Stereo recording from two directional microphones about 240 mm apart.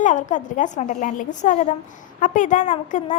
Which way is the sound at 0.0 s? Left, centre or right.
Left.